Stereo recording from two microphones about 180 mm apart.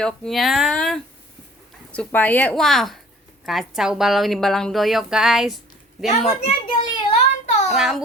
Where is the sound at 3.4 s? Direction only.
Centre (ahead or behind).